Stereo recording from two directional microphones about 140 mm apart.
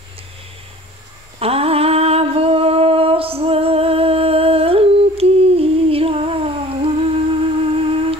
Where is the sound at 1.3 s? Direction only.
45° right (ahead or behind).